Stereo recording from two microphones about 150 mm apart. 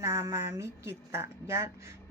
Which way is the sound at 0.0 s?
20° right (ahead or behind).